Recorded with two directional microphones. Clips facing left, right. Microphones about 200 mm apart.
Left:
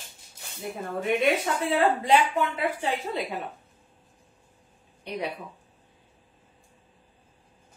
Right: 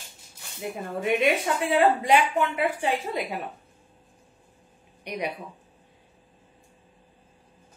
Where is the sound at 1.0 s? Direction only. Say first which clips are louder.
Right 1 dB; 15° right (ahead or behind).